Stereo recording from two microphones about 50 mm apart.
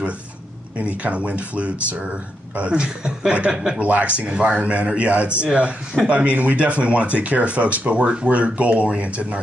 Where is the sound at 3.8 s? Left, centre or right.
Right.